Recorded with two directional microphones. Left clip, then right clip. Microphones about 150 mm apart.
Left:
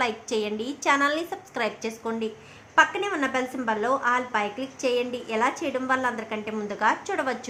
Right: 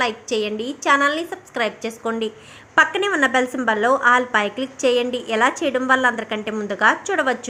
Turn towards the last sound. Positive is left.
turn(degrees=-25)  # may be behind; listen again after turning